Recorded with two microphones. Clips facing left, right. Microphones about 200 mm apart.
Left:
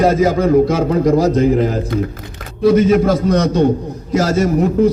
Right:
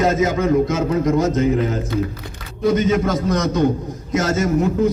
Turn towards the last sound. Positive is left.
turn(degrees=30)  # may be behind; listen again after turning